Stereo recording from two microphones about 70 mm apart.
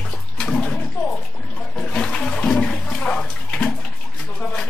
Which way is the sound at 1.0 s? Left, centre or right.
Left.